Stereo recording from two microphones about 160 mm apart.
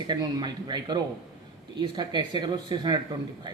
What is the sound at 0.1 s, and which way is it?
A man's voice, 25° right (ahead or behind).